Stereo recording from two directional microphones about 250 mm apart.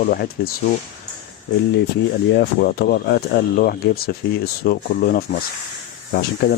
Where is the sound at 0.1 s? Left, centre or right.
Left.